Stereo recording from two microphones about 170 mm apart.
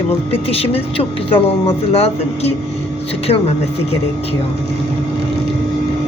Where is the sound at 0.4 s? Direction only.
35° left (ahead or behind).